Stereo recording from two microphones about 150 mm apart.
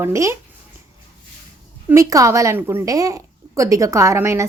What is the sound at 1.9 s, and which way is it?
A woman's voice, 20° right (ahead or behind).